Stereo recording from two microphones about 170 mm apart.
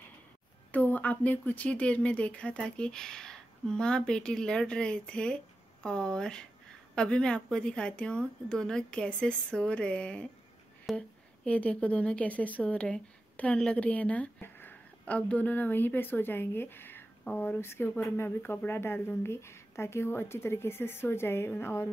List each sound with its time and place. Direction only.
0.7 s a woman's voice: 10° left (ahead or behind)